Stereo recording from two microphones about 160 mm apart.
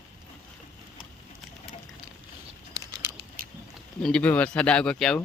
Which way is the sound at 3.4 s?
60° right (ahead or behind).